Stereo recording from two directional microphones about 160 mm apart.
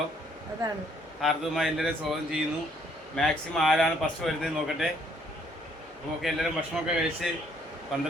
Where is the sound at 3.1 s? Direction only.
5° left (ahead or behind).